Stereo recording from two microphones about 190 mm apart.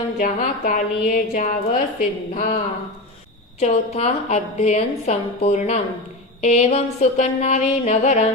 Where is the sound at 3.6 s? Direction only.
35° left (ahead or behind).